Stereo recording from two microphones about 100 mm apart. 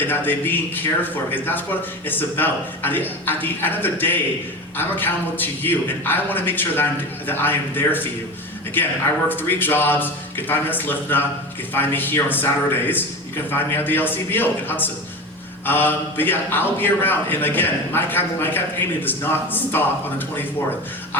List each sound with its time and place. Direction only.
0.0 s a man's voice: 20° left (ahead or behind)
9.3 s a man's voice: 20° left (ahead or behind)